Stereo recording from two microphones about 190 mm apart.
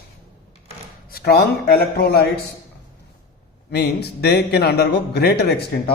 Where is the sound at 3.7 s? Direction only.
60° left (ahead or behind).